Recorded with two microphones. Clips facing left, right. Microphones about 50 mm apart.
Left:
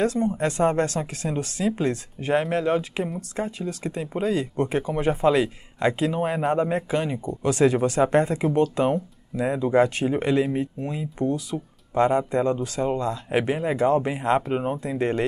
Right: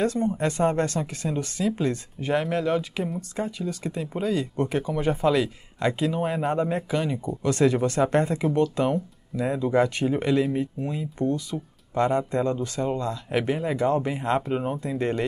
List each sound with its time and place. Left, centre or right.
0.0 s speech: centre
1.3 s speech: centre
2.3 s speech: centre
3.6 s speech: centre
4.2 s speech: left
7.2 s speech: centre